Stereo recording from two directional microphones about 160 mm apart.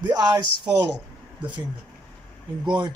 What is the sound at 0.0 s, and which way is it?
Speech, 25° right (ahead or behind).